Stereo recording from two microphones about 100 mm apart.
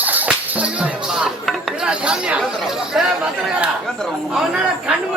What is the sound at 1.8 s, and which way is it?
Chatter, 10° right (ahead or behind).